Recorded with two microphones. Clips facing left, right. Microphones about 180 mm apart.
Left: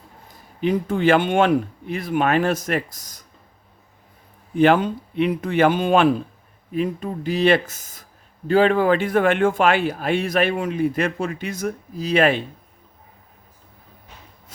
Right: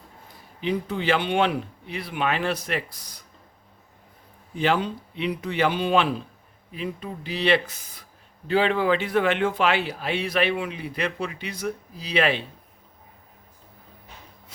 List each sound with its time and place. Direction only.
0.6 s speech: 50° left (ahead or behind)
4.5 s speech: 55° left (ahead or behind)